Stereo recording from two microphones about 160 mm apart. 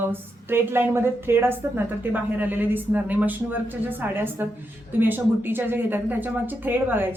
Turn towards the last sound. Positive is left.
turn(degrees=-10)  # may be behind; listen again after turning